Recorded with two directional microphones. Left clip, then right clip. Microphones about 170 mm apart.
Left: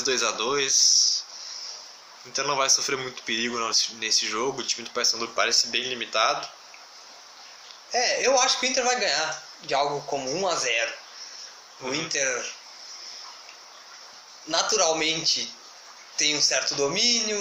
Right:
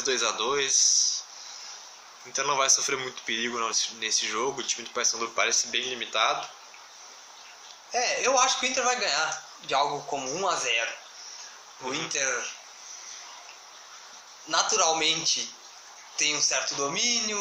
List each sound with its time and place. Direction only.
0.0 s speech: 5° left (ahead or behind)
2.3 s speech: centre (ahead or behind)
7.9 s a man's voice: 10° left (ahead or behind)
14.4 s a man's voice: 10° left (ahead or behind)